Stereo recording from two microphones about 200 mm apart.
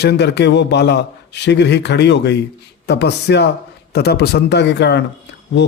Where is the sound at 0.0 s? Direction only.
55° left (ahead or behind).